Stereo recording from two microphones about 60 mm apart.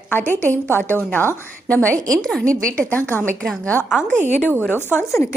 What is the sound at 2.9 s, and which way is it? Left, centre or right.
Speech, left.